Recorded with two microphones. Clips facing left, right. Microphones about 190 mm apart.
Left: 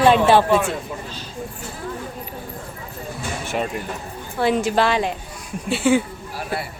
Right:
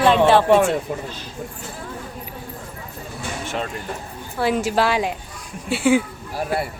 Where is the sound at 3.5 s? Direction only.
10° left (ahead or behind).